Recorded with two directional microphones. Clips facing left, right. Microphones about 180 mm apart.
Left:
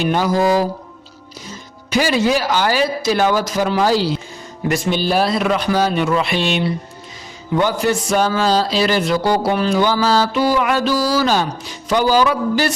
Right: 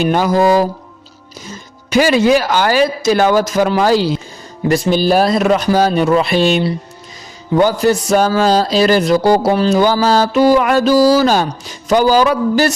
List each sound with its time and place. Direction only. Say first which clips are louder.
0.0 s speech: right 4 dB; 50° right (ahead or behind)
1.9 s speech: right 5 dB; 55° right (ahead or behind)
4.7 s speech: right 5 dB; 40° right (ahead or behind)